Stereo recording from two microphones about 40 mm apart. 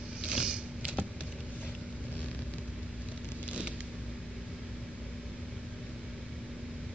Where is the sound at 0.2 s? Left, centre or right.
Right.